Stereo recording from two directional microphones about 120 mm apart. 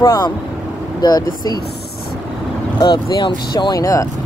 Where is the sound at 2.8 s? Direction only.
35° left (ahead or behind).